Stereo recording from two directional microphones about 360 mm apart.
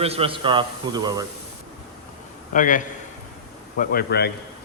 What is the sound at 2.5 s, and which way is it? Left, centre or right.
A man's voice, left.